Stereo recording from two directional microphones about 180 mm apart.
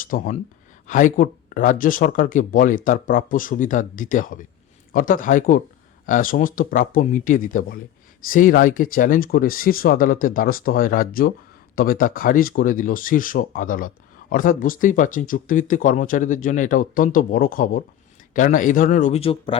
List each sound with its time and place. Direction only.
0.0 s speech: 50° left (ahead or behind); by 19.5 s 30° left (ahead or behind)